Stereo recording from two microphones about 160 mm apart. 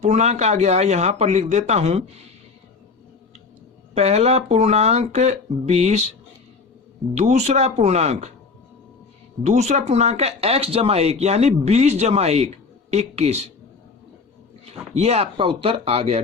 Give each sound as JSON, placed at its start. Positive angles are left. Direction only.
{"t": 0.0, "sound": "speech", "side_deg": -45}
{"t": 3.9, "sound": "speech", "side_deg": -40}
{"t": 7.1, "sound": "speech", "side_deg": -45}
{"t": 9.4, "sound": "speech", "side_deg": -45}
{"t": 14.9, "sound": "speech", "side_deg": -40}